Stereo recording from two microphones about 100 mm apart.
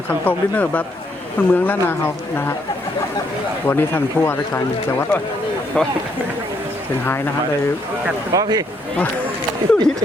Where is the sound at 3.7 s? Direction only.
20° left (ahead or behind).